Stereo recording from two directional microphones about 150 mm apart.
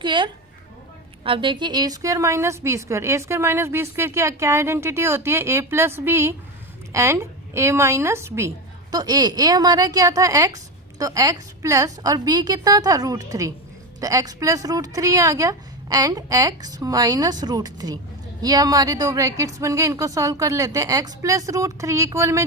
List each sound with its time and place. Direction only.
0.0 s a woman's voice: 30° right (ahead or behind)